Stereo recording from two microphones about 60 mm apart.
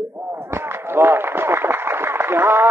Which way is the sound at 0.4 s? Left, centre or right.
Right.